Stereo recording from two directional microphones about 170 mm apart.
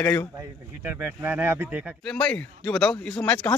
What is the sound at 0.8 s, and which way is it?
Speech, 10° right (ahead or behind).